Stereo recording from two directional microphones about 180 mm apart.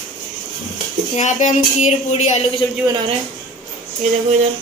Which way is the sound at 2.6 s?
25° left (ahead or behind).